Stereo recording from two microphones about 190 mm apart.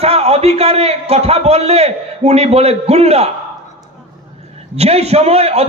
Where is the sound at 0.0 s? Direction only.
35° right (ahead or behind).